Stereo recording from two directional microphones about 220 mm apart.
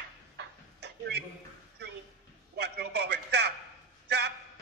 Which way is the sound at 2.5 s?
50° right (ahead or behind).